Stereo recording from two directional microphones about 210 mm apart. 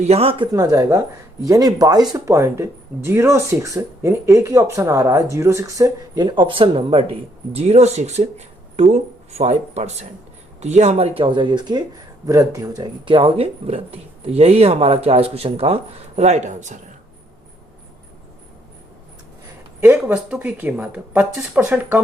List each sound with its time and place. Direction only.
0.0 s speech: 30° right (ahead or behind)
19.8 s speech: 5° right (ahead or behind)